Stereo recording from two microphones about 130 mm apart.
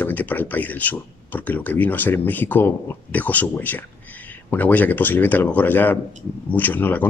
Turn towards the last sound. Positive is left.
turn(degrees=15)  # may be behind; listen again after turning